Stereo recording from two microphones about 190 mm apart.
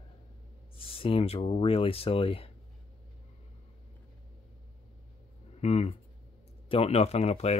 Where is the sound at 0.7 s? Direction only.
30° left (ahead or behind).